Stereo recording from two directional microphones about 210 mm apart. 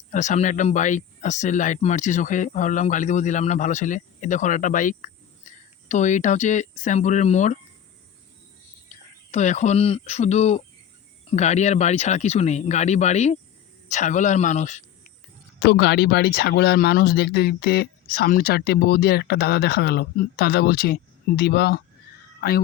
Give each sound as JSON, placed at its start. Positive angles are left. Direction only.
{"t": 0.1, "sound": "speech", "side_deg": 35}
{"t": 9.3, "sound": "speech", "side_deg": 35}
{"t": 15.6, "sound": "speech", "side_deg": 50}